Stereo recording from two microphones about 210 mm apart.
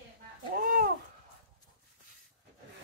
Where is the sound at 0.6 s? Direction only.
45° right (ahead or behind).